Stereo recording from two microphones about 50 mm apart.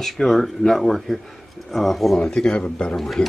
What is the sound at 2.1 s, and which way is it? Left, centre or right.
Speech, centre.